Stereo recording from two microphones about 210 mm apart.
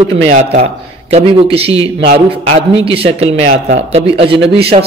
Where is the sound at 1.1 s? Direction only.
25° right (ahead or behind).